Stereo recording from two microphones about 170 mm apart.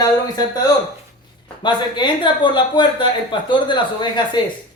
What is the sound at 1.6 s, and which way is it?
Speech, 25° left (ahead or behind).